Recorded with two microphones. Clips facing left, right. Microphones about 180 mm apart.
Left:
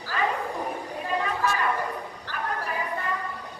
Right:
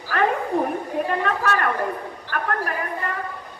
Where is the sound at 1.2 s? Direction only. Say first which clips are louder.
Right 4 dB; 65° right (ahead or behind).